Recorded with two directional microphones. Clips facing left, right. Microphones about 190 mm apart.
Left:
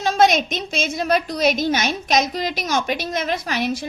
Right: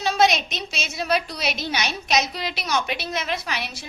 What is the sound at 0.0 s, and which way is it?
A woman's voice, 50° left (ahead or behind).